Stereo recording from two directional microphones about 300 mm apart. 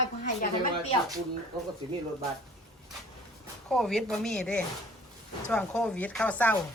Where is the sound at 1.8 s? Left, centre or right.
Centre.